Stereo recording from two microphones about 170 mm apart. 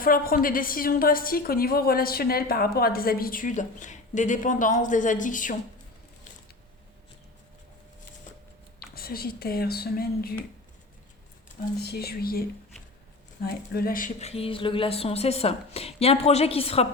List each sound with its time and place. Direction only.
0.0 s a woman's voice: 55° left (ahead or behind)
9.0 s a woman's voice: 60° left (ahead or behind)
11.8 s a woman's voice: 70° left (ahead or behind)
14.2 s a woman's voice: 35° left (ahead or behind)